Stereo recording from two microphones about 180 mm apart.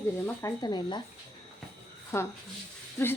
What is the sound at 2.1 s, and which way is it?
Speech, 15° left (ahead or behind).